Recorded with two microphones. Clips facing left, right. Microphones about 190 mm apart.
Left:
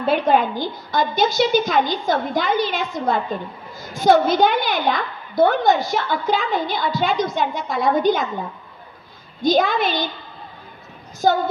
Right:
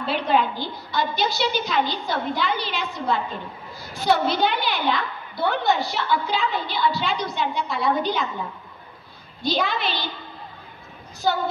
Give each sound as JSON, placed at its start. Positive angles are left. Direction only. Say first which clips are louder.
{"t": 0.0, "sound": "a woman's voice", "louder": "left 5 dB", "side_deg": 50}
{"t": 9.4, "sound": "a woman's voice", "louder": "left 7 dB", "side_deg": 45}
{"t": 11.2, "sound": "a woman's voice", "louder": "left 6 dB", "side_deg": 50}